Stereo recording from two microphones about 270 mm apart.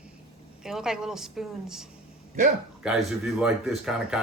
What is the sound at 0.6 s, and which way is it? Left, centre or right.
A man's voice, centre.